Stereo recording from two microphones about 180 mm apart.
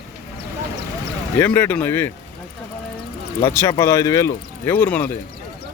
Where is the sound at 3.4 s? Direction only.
15° left (ahead or behind).